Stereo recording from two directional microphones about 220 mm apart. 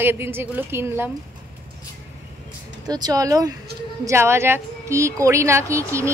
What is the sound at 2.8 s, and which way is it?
A woman's voice, 20° right (ahead or behind).